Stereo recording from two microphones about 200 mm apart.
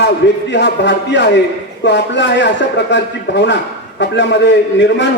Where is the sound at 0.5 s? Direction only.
60° left (ahead or behind).